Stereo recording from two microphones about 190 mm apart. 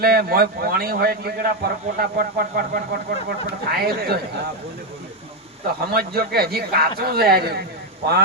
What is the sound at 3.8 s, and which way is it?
Speech, 55° right (ahead or behind).